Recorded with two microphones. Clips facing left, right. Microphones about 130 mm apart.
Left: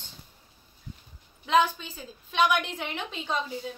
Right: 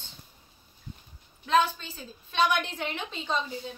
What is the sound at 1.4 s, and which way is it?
A woman's voice, 15° left (ahead or behind).